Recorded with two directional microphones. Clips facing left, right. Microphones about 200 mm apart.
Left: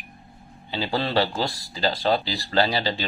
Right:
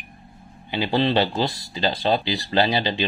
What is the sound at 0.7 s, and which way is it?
Speech, 15° right (ahead or behind).